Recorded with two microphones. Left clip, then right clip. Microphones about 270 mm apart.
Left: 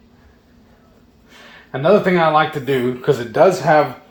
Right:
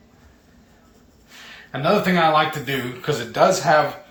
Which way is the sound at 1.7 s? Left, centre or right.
Left.